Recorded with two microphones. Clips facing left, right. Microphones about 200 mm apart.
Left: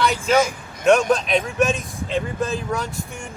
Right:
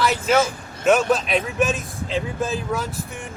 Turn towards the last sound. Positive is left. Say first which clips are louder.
# even
turn(degrees=0)  # may be behind; listen again after turning